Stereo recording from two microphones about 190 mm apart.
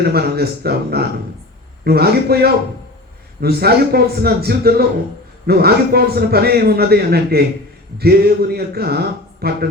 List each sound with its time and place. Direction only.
0.0 s a man's voice: 55° right (ahead or behind)